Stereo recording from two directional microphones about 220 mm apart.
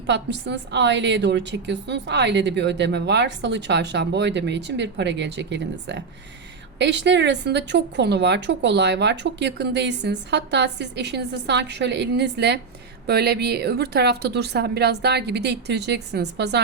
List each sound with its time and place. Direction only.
0.1 s a woman's voice: 50° right (ahead or behind)